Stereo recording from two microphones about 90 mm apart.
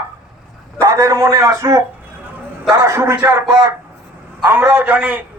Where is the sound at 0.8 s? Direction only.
35° right (ahead or behind).